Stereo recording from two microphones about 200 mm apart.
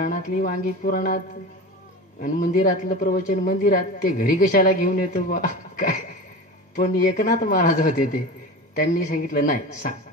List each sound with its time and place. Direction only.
0.0 s speech: 40° left (ahead or behind)
2.2 s speech: 40° left (ahead or behind)